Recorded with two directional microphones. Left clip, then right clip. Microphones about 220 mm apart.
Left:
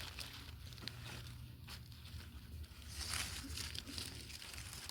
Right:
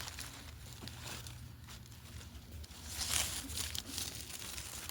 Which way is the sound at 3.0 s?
45° right (ahead or behind).